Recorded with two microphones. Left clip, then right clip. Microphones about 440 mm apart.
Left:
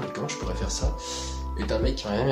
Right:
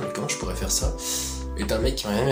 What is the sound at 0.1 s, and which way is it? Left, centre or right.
Music, left.